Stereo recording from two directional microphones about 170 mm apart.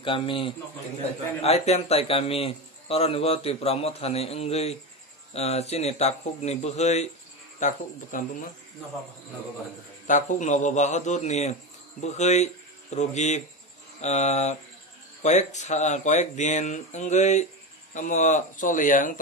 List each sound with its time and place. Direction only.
0.0 s a man's voice: 30° left (ahead or behind); by 8.5 s 50° left (ahead or behind)
10.0 s a man's voice: 45° left (ahead or behind)